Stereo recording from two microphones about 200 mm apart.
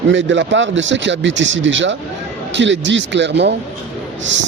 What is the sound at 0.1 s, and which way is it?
Speech, 65° right (ahead or behind).